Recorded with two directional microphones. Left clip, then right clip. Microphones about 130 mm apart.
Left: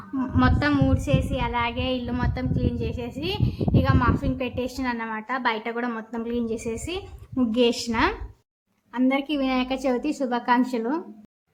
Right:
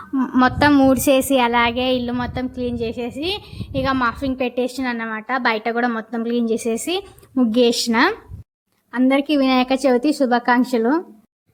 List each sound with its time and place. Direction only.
0.3 s a woman's voice: 90° right; by 2.0 s 55° right (ahead or behind)
2.0 s a woman's voice: 35° right (ahead or behind)